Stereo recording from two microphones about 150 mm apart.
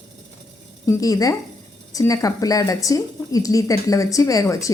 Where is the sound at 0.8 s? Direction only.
20° left (ahead or behind).